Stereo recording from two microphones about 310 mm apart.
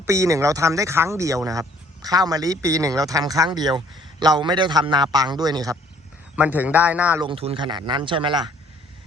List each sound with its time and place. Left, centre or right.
0.0 s a man's voice: centre
7.3 s speech: centre